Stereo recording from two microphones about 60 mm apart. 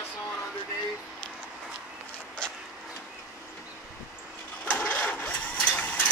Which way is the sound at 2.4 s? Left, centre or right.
Centre.